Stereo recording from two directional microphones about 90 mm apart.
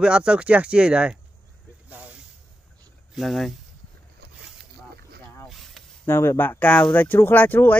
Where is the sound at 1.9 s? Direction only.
15° right (ahead or behind).